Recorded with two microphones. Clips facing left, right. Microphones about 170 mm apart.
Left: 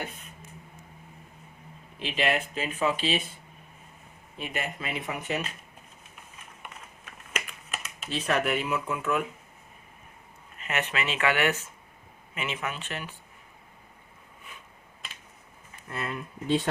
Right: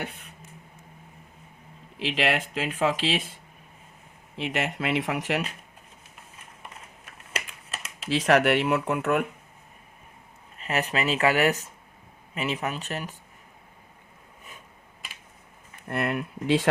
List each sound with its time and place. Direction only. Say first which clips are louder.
0.0 s speech: right 2 dB; 70° right (ahead or behind)
2.0 s speech: right 2 dB; 90° right
4.4 s speech: right 5 dB; 80° right
7.9 s speech: right 7 dB; 90° right; by 9.2 s 65° right (ahead or behind)
10.6 s speech: right 4 dB; 35° right (ahead or behind)
15.9 s speech: right 7 dB; 65° right (ahead or behind)